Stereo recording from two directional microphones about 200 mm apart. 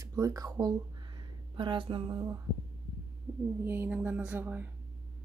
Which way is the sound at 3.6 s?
10° right (ahead or behind).